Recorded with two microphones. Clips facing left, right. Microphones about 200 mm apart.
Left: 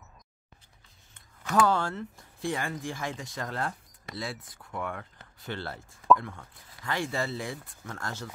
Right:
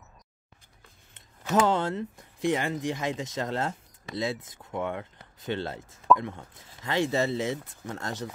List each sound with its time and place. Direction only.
1.1 s speech: 20° right (ahead or behind)